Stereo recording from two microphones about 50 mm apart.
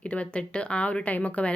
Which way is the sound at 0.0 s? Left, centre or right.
Left.